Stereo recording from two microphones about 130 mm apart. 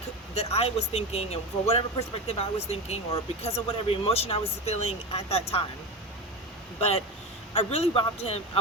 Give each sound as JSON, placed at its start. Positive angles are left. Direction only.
{"t": 0.3, "sound": "speech", "side_deg": 50}
{"t": 6.7, "sound": "speech", "side_deg": 50}